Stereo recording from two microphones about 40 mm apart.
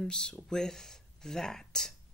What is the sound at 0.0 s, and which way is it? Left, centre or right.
Speech, centre.